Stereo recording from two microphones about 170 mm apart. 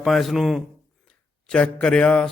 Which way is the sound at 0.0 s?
Centre (ahead or behind).